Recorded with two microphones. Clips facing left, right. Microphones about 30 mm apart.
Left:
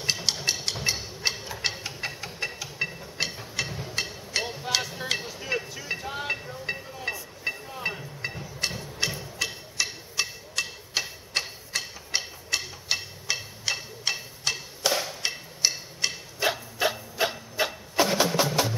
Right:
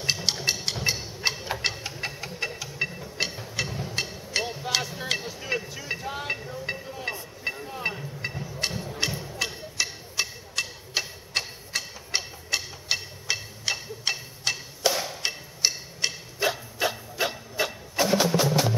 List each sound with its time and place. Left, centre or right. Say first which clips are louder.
0.0 s a sound: right 1 dB; centre
1.2 s tick-tock: right 1 dB; centre
1.6 s music: right 1 dB; centre
3.7 s a sound: right 1 dB; centre
7.4 s music: right 1 dB; centre
14.9 s wood block: right 1 dB; centre
16.4 s wood: left 1 dB; centre